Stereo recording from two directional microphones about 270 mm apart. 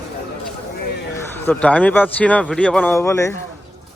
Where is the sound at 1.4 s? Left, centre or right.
Centre.